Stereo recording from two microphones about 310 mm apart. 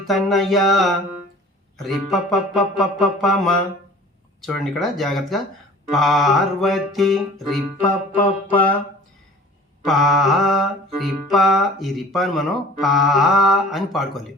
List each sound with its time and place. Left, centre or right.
0.1 s music: centre
7.8 s music: centre
9.8 s music: centre